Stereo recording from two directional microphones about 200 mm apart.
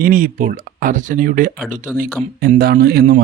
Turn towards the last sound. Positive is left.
turn(degrees=-50)  # may be behind; listen again after turning